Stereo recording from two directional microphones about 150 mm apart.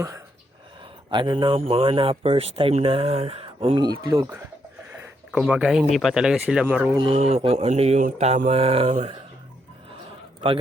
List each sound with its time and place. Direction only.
1.1 s speech: 30° right (ahead or behind)
4.9 s a sound: 5° right (ahead or behind)
5.9 s speech: centre (ahead or behind)
6.9 s speech: 35° right (ahead or behind)